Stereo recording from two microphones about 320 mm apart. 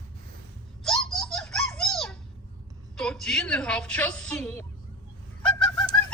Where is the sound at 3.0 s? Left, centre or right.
Centre.